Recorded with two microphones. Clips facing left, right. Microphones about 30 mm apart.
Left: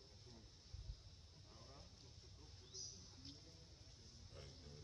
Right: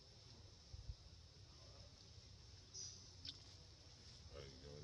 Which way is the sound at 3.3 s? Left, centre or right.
Right.